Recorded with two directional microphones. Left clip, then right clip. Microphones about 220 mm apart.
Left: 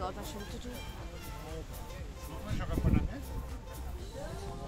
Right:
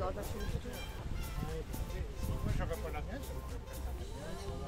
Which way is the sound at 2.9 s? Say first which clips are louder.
Left 7 dB; 35° right (ahead or behind).